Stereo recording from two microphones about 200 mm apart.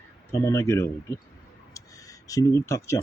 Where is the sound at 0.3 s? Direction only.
15° left (ahead or behind).